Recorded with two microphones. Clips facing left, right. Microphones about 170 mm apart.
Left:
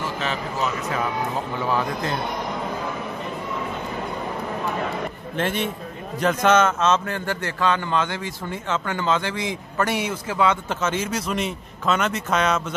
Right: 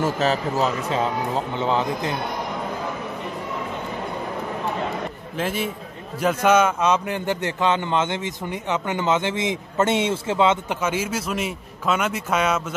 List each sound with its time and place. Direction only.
0.0 s speech: 40° right (ahead or behind); by 2.1 s 20° right (ahead or behind)
5.4 s a man's voice: 5° right (ahead or behind)